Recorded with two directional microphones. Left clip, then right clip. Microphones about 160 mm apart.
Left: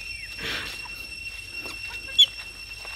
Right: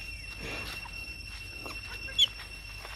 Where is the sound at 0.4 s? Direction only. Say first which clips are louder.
Left 9 dB; 50° left (ahead or behind).